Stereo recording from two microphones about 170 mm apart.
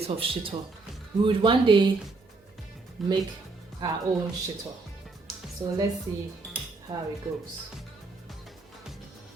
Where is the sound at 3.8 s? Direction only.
25° right (ahead or behind).